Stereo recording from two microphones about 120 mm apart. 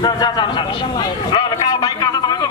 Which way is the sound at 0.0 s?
40° left (ahead or behind).